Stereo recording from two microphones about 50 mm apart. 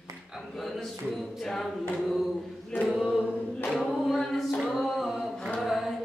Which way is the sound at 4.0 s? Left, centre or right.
Centre.